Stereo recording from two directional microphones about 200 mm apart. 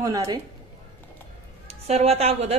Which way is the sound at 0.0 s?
15° right (ahead or behind).